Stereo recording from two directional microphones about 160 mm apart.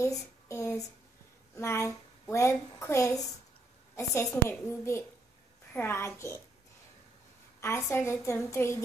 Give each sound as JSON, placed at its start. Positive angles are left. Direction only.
{"t": 0.0, "sound": "a sound", "side_deg": 20}
{"t": 1.5, "sound": "a woman's voice", "side_deg": 15}
{"t": 7.6, "sound": "a woman's voice", "side_deg": 15}